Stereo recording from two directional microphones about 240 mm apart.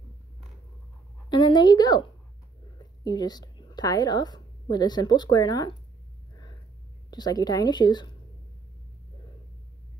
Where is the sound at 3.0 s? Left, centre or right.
Centre.